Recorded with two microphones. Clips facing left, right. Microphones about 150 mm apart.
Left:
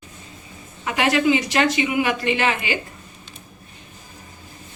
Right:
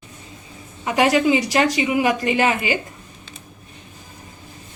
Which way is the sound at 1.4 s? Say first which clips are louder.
Right 1 dB; 40° right (ahead or behind).